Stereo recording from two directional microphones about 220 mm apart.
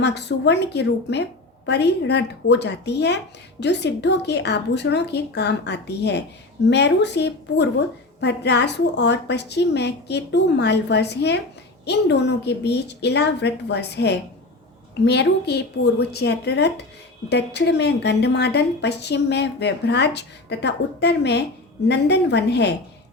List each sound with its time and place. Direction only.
0.0 s a woman's voice: 50° left (ahead or behind)